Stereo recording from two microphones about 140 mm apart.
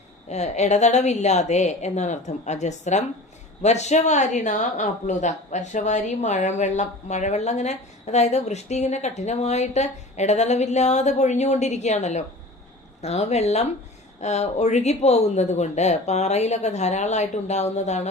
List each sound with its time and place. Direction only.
0.3 s speech: 50° left (ahead or behind)